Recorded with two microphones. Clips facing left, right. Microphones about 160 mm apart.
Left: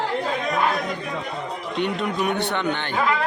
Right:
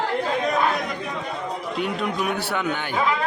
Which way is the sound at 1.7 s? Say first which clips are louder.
Left 2 dB; centre (ahead or behind).